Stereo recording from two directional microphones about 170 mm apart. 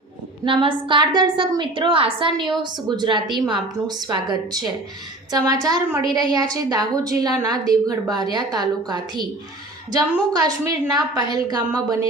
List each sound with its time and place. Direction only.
0.4 s a woman's voice: 30° right (ahead or behind)